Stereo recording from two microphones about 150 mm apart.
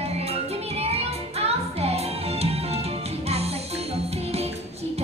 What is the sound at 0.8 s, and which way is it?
Music, 45° right (ahead or behind).